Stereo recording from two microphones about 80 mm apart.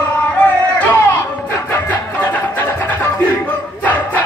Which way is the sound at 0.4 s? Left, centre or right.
Centre.